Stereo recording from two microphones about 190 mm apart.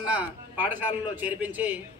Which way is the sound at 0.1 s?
10° right (ahead or behind).